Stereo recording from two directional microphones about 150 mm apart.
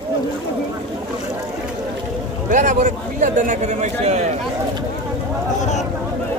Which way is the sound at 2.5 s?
55° right (ahead or behind).